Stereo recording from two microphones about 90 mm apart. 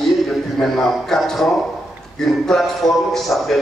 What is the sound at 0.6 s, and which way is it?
A man's voice, 5° left (ahead or behind).